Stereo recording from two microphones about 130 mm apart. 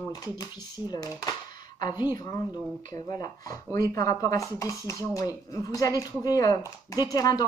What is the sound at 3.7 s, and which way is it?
Speech, 25° left (ahead or behind).